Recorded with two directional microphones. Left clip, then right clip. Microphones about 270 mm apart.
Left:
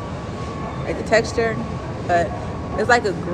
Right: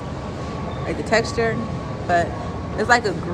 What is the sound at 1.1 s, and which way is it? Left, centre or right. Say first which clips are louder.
Speech: left 2 dB; centre.